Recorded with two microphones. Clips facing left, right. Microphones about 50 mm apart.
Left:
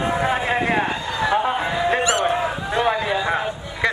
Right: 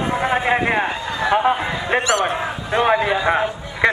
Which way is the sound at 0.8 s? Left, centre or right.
Centre.